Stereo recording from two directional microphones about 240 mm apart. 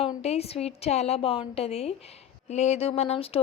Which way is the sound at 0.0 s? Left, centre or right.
Left.